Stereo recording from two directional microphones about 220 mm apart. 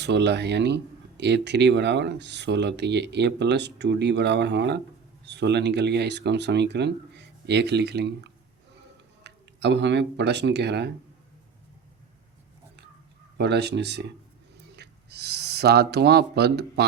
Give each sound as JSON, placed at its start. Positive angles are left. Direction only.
{"t": 0.0, "sound": "speech", "side_deg": -50}
{"t": 13.4, "sound": "speech", "side_deg": -50}